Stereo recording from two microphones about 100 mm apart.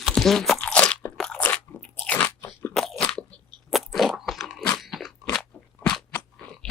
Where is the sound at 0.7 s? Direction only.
10° left (ahead or behind).